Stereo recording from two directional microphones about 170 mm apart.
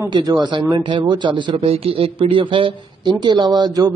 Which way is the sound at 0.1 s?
25° right (ahead or behind).